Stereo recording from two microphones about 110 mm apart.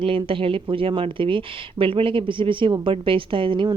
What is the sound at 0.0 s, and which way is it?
A woman's voice, 55° right (ahead or behind).